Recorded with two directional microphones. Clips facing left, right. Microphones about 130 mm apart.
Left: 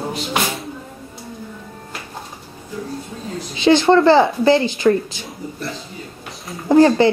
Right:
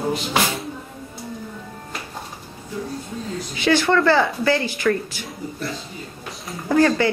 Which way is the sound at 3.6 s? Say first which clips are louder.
Left 6 dB; 25° left (ahead or behind).